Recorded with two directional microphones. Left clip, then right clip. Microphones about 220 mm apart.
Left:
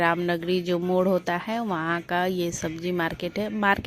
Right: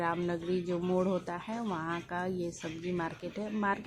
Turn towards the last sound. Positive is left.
turn(degrees=35)  # may be behind; listen again after turning